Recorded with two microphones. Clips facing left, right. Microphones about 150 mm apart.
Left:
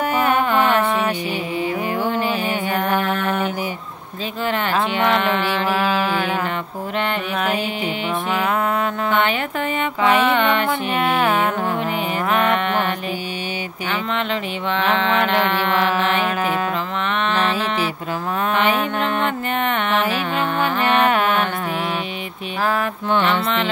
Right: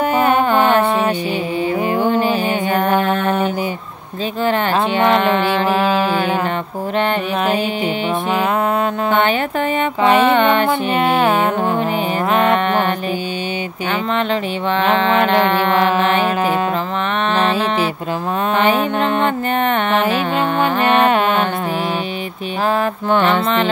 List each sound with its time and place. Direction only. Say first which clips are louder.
0.0 s mantra: right 4 dB; 30° right (ahead or behind)
4.5 s music: right 4 dB; 35° right (ahead or behind)
7.0 s mantra: right 5 dB; 30° right (ahead or behind)
9.1 s music: right 4 dB; 35° right (ahead or behind)
14.1 s music: right 5 dB; 40° right (ahead or behind)
23.0 s music: right 3 dB; 45° right (ahead or behind)